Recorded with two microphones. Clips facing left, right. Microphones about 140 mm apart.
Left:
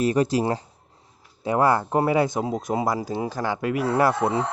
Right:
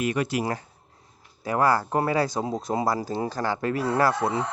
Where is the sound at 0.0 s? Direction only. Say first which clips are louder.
Left 5 dB; 35° left (ahead or behind).